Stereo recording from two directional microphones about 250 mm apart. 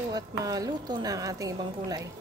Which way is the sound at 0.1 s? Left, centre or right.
Centre.